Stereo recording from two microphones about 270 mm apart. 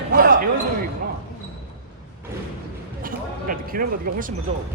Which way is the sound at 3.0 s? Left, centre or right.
Right.